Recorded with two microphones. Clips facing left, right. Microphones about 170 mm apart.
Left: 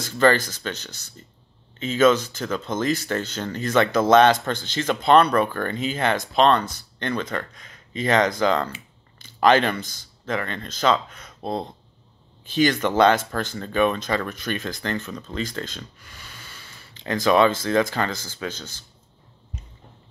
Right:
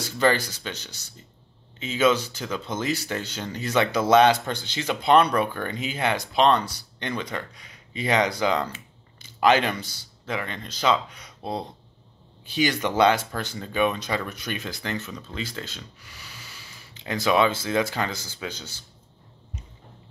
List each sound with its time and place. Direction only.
0.0 s speech: 10° right (ahead or behind)
9.8 s a man's voice: 50° left (ahead or behind)
10.2 s speech: 10° right (ahead or behind)